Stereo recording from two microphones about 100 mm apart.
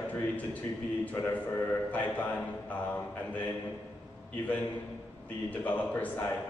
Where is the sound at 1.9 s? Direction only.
15° left (ahead or behind).